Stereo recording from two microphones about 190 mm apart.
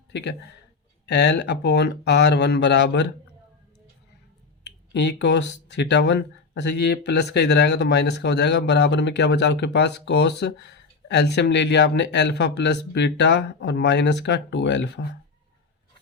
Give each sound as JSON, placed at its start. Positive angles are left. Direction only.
{"t": 0.1, "sound": "a man's voice", "side_deg": 65}
{"t": 4.6, "sound": "speech", "side_deg": 65}